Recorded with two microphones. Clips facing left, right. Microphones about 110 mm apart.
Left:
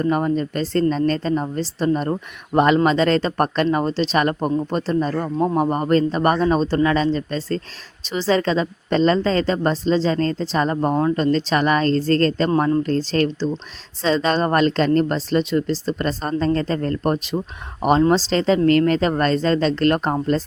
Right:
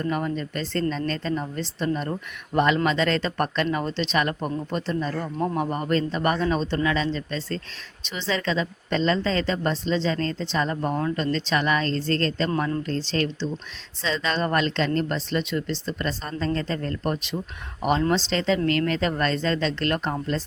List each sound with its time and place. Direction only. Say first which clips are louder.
0.0 s a woman's voice: left 7 dB; 40° left (ahead or behind)